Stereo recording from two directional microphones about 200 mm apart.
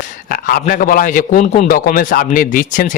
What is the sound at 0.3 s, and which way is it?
A man's voice, 45° left (ahead or behind).